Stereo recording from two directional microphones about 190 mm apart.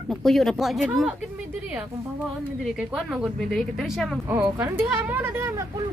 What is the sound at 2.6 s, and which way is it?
Speech, centre (ahead or behind).